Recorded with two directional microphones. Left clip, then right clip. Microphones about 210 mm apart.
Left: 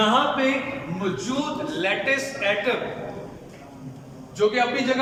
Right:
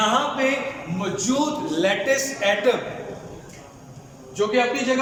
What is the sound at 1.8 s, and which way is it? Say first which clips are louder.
Speech: right 2 dB; 30° right (ahead or behind).